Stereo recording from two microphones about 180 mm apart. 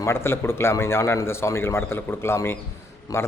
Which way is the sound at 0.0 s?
15° left (ahead or behind).